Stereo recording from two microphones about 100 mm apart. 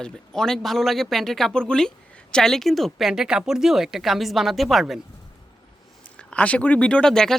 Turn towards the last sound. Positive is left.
turn(degrees=5)  # may be behind; listen again after turning